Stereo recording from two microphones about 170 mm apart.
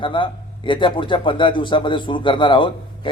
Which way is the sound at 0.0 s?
30° left (ahead or behind).